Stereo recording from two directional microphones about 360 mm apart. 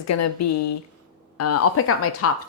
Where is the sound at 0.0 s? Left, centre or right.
Left.